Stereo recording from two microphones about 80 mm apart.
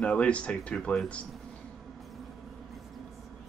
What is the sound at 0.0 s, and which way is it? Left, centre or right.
Speech, centre.